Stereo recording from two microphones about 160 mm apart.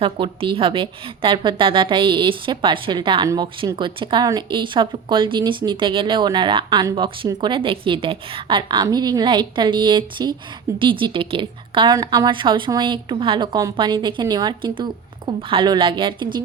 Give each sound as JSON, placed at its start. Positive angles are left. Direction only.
{"t": 0.0, "sound": "a woman's voice", "side_deg": -35}